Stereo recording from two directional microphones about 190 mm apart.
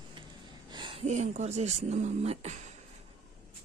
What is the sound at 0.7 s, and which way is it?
Speech, 25° right (ahead or behind).